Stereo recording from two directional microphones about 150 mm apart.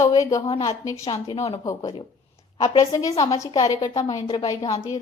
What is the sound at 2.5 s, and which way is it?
A woman's voice, 30° left (ahead or behind).